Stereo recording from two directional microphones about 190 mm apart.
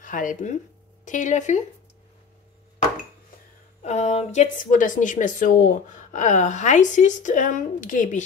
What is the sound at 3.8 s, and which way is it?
A woman's voice, 35° left (ahead or behind).